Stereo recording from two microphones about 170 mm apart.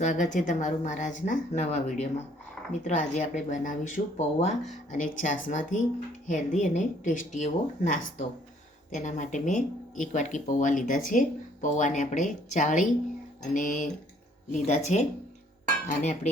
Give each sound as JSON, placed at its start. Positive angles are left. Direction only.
{"t": 0.0, "sound": "speech", "side_deg": 45}